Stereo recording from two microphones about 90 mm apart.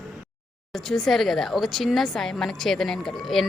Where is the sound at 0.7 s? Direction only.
Centre (ahead or behind).